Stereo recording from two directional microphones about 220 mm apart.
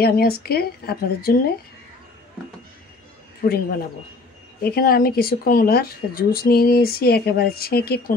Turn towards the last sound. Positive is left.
turn(degrees=45)  # may be behind; listen again after turning